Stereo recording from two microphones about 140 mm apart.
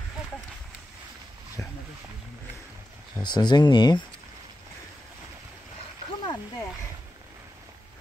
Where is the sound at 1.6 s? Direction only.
20° left (ahead or behind).